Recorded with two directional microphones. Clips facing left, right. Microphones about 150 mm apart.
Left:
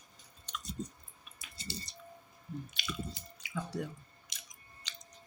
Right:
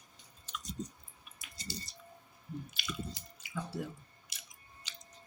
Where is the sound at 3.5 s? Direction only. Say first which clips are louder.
Left 1 dB; 5° right (ahead or behind).